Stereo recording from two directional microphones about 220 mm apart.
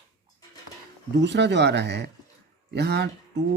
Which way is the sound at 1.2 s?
50° right (ahead or behind).